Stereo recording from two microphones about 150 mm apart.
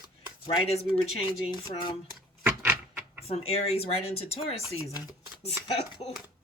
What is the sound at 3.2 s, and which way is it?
Speech, 40° left (ahead or behind).